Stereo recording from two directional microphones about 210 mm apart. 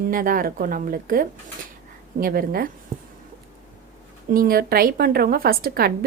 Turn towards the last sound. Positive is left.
turn(degrees=-45)  # may be behind; listen again after turning